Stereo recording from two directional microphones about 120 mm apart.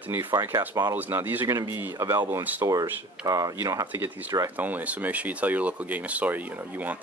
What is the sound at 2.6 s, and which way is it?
Speech, 30° right (ahead or behind).